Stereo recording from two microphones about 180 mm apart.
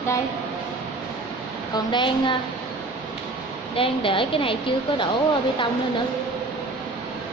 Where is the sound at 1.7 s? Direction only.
25° left (ahead or behind).